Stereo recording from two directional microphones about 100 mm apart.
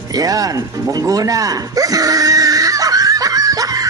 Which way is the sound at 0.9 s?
35° right (ahead or behind).